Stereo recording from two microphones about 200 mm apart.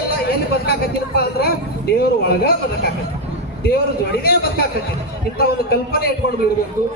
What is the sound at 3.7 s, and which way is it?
Speech, 50° left (ahead or behind).